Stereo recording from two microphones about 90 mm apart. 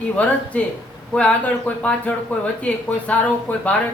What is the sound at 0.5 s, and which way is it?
Speech, 15° left (ahead or behind).